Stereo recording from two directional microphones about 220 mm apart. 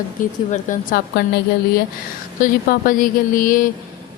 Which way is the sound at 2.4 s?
40° left (ahead or behind).